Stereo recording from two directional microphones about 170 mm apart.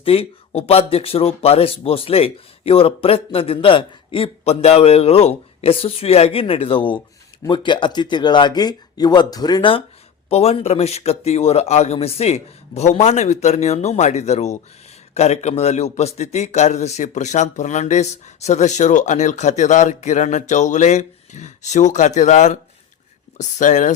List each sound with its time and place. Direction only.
0.0 s a man's voice: 35° left (ahead or behind)